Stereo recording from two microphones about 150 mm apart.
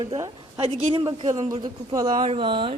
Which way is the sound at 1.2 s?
50° right (ahead or behind).